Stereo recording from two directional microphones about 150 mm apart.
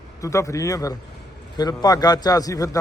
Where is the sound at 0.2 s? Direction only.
20° left (ahead or behind).